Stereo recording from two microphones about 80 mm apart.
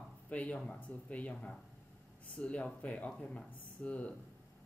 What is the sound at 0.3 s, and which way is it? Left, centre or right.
Speech, centre.